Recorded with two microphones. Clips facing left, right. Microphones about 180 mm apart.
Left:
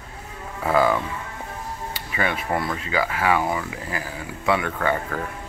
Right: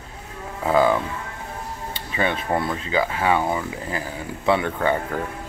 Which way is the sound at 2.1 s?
25° right (ahead or behind).